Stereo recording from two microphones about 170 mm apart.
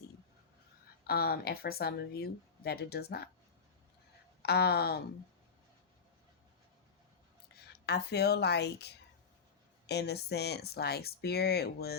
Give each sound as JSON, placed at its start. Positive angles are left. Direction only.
{"t": 1.0, "sound": "speech", "side_deg": 65}
{"t": 4.4, "sound": "speech", "side_deg": 70}
{"t": 7.7, "sound": "speech", "side_deg": 75}